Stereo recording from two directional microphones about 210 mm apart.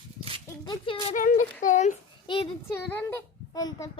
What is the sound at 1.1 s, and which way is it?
Speech, 40° left (ahead or behind).